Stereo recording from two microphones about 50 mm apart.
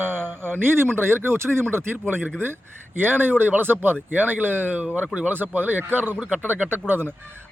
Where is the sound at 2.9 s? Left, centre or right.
Right.